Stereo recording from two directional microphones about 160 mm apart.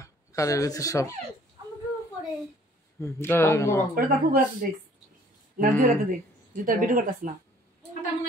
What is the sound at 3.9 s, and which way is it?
Speech, 65° right (ahead or behind).